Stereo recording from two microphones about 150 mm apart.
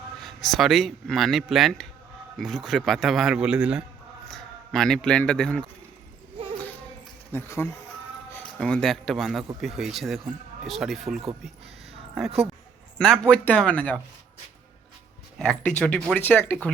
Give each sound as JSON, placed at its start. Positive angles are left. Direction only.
{"t": 0.2, "sound": "a man's voice", "side_deg": 0}
{"t": 7.3, "sound": "speech", "side_deg": 15}
{"t": 15.4, "sound": "speech", "side_deg": 5}